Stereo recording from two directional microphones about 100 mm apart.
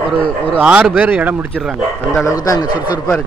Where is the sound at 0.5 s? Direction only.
10° right (ahead or behind).